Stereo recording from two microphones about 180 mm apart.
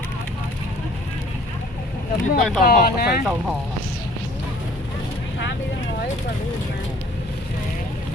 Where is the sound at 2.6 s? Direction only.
55° left (ahead or behind).